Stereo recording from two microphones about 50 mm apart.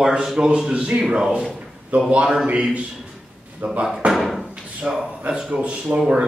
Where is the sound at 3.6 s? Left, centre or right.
Right.